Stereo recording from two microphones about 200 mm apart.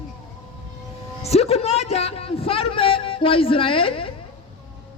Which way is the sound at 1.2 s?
30° left (ahead or behind).